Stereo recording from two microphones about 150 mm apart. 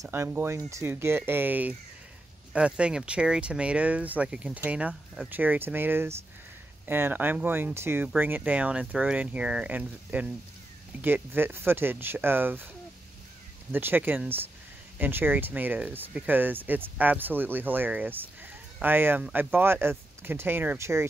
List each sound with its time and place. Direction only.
0.0 s speech: 15° right (ahead or behind)
13.7 s speech: 15° right (ahead or behind)